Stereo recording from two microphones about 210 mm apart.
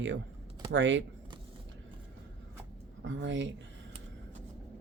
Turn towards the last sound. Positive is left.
turn(degrees=-60)  # may be behind; listen again after turning